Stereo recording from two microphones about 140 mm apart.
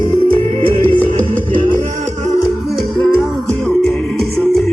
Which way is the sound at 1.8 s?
55° right (ahead or behind).